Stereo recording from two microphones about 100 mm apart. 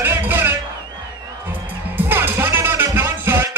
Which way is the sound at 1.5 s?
20° right (ahead or behind).